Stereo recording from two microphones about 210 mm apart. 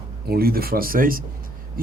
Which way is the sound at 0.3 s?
45° right (ahead or behind).